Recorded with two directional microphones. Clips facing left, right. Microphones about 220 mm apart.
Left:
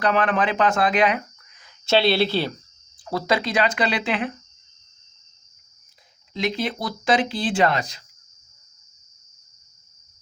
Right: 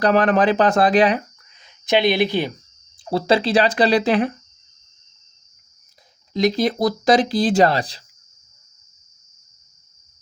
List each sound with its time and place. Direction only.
0.0 s speech: 35° right (ahead or behind)
1.6 s speech: 15° right (ahead or behind)
3.0 s speech: 30° right (ahead or behind)
6.3 s speech: 40° right (ahead or behind)